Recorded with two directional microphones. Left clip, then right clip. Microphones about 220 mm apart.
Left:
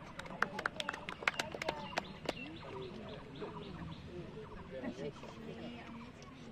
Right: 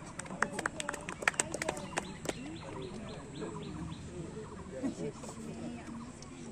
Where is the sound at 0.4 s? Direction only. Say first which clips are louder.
Right 2 dB; 45° left (ahead or behind).